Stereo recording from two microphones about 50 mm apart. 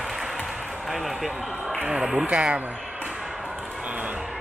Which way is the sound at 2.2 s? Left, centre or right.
Right.